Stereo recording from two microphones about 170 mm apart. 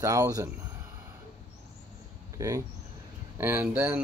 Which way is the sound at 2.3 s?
20° right (ahead or behind).